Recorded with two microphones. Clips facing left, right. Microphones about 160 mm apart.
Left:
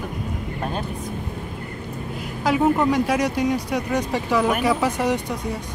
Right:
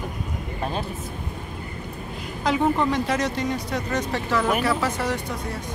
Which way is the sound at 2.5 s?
10° left (ahead or behind).